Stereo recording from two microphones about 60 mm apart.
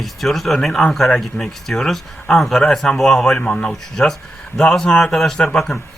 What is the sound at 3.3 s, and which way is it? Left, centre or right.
Speech, centre.